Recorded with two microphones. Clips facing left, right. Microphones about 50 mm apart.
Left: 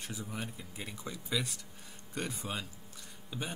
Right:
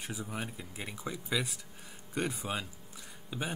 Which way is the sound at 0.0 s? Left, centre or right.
Centre.